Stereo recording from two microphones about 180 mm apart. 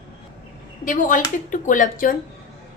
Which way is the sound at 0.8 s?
45° left (ahead or behind).